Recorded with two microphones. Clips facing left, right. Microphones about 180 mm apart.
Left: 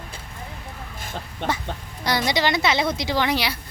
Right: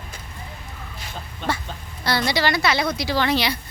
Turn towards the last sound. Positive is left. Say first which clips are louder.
# right 1 dB
turn(degrees=10)  # may be behind; listen again after turning